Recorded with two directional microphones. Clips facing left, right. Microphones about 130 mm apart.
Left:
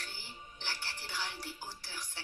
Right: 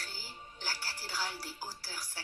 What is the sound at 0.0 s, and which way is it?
Music, 40° right (ahead or behind).